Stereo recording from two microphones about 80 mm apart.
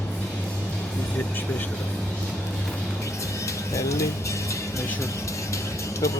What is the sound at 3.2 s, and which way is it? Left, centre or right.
Music, left.